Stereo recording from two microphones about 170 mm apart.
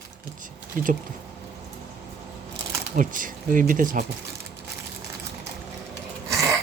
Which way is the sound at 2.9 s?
50° right (ahead or behind).